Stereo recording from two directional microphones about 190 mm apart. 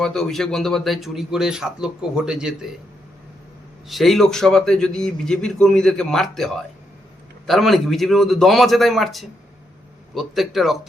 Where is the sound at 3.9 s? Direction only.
Centre (ahead or behind).